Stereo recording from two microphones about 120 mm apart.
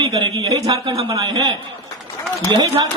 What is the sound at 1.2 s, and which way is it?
Music, 30° right (ahead or behind).